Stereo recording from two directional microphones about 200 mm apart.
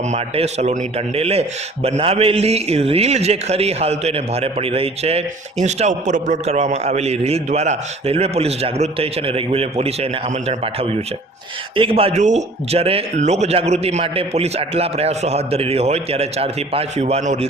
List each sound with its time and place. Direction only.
0.1 s a man's voice: 35° right (ahead or behind)